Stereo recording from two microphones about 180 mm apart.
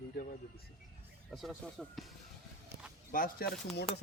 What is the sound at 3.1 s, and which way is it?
Speech, 50° left (ahead or behind).